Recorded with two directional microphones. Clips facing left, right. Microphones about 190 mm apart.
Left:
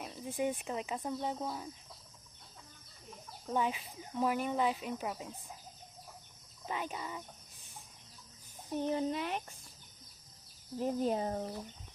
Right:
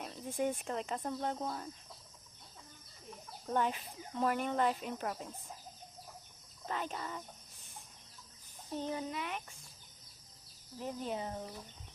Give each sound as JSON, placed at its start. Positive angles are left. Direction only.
{"t": 0.0, "sound": "a sound", "side_deg": 0}
{"t": 0.6, "sound": "speech", "side_deg": 5}
{"t": 3.1, "sound": "speech", "side_deg": 0}
{"t": 6.7, "sound": "speech", "side_deg": 10}
{"t": 8.7, "sound": "speech", "side_deg": 15}
{"t": 9.0, "sound": "speech", "side_deg": 35}
{"t": 10.8, "sound": "speech", "side_deg": 40}